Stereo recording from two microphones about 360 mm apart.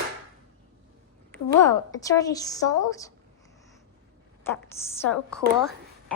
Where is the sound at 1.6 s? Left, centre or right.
Centre.